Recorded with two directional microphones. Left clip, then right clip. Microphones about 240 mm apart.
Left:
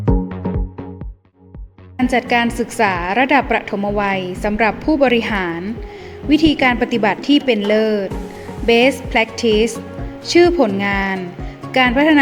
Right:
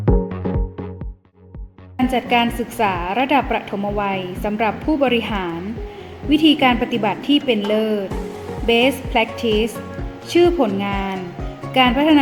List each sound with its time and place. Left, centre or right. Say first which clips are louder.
2.0 s a woman's voice: left 2 dB; left